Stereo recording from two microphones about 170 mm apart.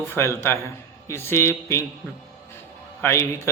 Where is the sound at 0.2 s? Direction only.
15° left (ahead or behind).